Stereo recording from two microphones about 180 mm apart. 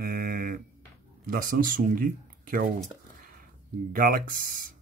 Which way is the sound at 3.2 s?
50° right (ahead or behind).